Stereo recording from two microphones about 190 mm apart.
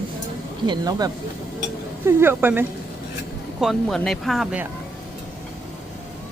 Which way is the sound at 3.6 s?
Centre (ahead or behind).